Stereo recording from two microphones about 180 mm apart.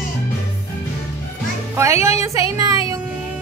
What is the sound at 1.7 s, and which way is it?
Music, 15° right (ahead or behind).